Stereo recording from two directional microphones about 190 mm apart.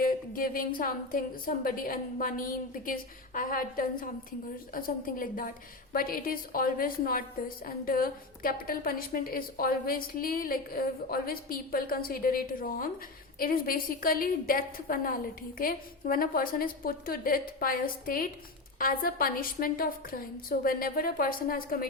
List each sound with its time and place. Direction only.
0.0 s a woman's voice: 50° left (ahead or behind)